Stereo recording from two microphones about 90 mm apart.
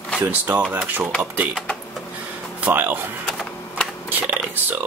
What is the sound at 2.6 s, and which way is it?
Speech, 20° right (ahead or behind).